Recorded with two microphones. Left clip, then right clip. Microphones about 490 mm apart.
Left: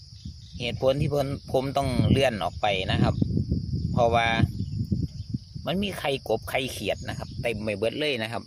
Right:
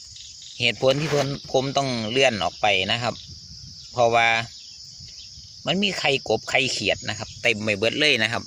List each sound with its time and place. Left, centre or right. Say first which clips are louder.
0.6 s speech: right 5 dB; left
5.6 s speech: right 6 dB; left